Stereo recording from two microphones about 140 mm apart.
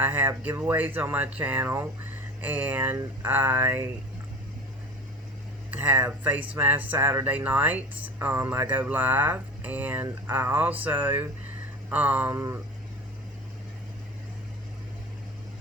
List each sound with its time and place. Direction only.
0.0 s speech: 15° right (ahead or behind)
5.7 s speech: 10° right (ahead or behind)